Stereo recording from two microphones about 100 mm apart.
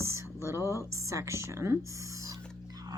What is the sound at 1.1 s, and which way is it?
Speech, 30° right (ahead or behind).